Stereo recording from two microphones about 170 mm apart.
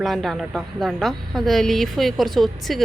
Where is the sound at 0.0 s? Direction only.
Centre (ahead or behind).